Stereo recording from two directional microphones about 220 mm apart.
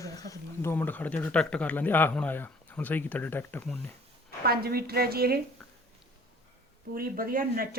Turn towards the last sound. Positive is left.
turn(degrees=-40)  # may be behind; listen again after turning